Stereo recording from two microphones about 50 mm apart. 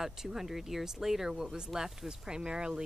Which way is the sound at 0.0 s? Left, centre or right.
Centre.